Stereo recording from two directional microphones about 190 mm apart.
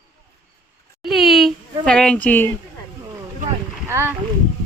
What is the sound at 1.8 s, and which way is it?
Speech, 5° left (ahead or behind).